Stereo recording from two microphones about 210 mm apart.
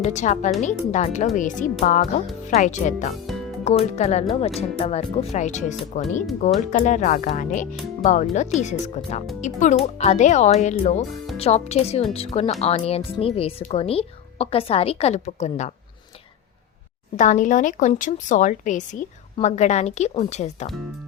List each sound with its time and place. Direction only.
0.0 s a woman's voice: 35° left (ahead or behind)
17.2 s speech: 35° left (ahead or behind)